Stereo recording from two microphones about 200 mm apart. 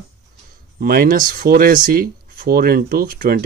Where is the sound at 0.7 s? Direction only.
45° right (ahead or behind).